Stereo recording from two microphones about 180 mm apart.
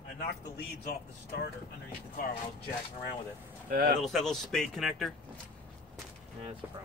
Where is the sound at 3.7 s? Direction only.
55° right (ahead or behind).